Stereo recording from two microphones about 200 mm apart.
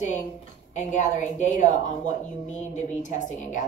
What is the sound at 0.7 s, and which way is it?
Speech, 35° left (ahead or behind).